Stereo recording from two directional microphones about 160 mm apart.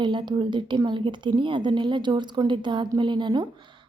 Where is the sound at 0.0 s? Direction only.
30° right (ahead or behind).